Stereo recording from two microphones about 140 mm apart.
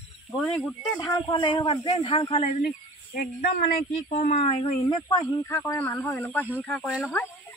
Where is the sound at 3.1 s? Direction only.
85° left; by 5.0 s 45° left (ahead or behind).